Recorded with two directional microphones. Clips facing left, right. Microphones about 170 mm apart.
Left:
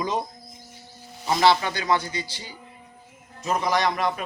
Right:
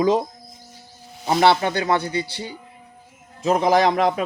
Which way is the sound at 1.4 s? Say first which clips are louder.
Right 3 dB; 55° right (ahead or behind).